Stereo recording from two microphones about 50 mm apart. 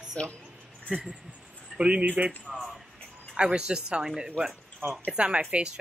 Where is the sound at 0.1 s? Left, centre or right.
Left.